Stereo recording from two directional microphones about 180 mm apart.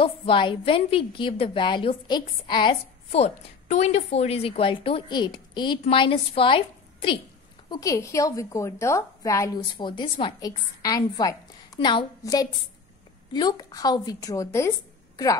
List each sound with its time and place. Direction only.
0.0 s a woman's voice: 30° left (ahead or behind)
7.7 s a woman's voice: 20° left (ahead or behind)